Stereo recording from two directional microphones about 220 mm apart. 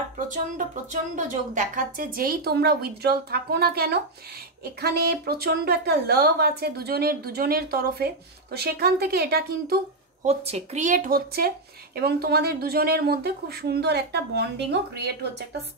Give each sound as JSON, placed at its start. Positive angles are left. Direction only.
{"t": 1.1, "sound": "speech", "side_deg": -35}
{"t": 10.2, "sound": "speech", "side_deg": -30}